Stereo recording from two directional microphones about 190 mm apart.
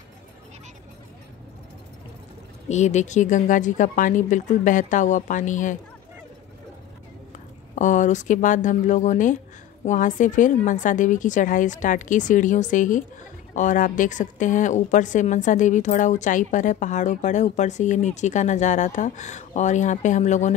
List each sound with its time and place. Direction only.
2.7 s a woman's voice: 35° left (ahead or behind)
7.3 s a woman's voice: 40° left (ahead or behind)